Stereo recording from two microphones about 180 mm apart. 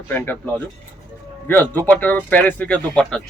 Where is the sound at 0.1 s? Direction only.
10° left (ahead or behind).